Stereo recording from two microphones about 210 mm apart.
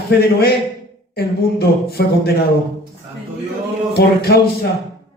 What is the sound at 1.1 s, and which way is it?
A man's voice, 50° left (ahead or behind).